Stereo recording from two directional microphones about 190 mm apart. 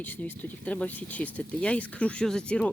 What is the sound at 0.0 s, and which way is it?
Speech, 10° left (ahead or behind).